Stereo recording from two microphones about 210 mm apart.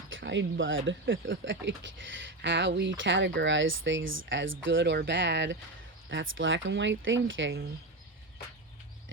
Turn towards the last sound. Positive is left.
turn(degrees=-60)  # may be behind; listen again after turning